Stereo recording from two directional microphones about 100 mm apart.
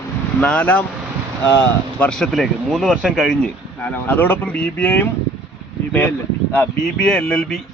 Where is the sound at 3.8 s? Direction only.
20° left (ahead or behind).